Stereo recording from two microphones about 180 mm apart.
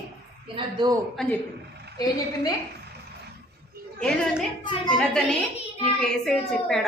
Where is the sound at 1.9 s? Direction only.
20° left (ahead or behind).